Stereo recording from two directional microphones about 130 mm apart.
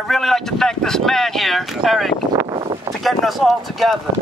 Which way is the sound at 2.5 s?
40° right (ahead or behind).